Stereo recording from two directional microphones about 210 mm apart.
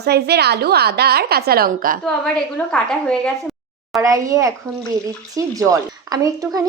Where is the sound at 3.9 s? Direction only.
15° right (ahead or behind).